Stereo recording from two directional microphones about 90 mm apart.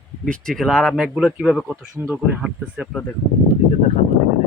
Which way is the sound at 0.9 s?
5° right (ahead or behind).